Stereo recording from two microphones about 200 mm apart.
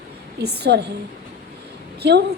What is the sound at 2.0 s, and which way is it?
Speech, 60° right (ahead or behind).